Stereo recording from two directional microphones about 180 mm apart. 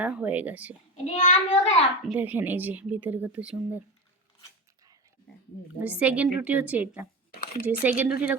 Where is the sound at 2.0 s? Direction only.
10° right (ahead or behind).